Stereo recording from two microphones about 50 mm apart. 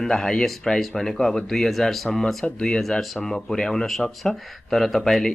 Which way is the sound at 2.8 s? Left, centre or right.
Centre.